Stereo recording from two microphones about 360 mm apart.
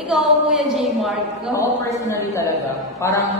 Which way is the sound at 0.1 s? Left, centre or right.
Centre.